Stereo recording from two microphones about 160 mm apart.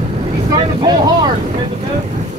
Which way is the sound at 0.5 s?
25° right (ahead or behind).